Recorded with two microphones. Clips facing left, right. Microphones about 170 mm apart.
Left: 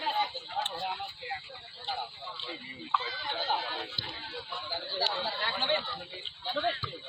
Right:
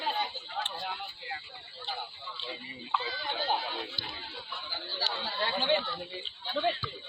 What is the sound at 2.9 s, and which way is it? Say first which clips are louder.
Chatter: right 1 dB; 10° right (ahead or behind).